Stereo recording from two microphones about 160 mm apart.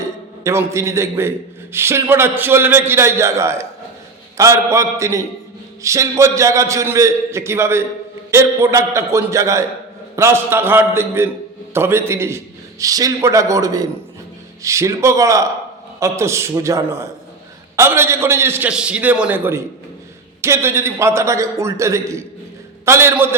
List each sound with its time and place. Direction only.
0.4 s a man's voice: 15° right (ahead or behind)